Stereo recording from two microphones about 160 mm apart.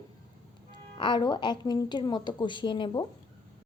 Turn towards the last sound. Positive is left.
turn(degrees=30)  # may be behind; listen again after turning